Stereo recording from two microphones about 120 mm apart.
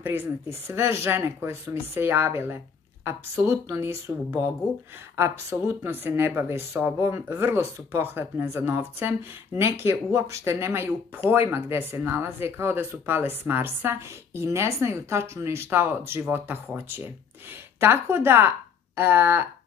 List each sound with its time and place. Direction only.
0.0 s speech: 20° right (ahead or behind)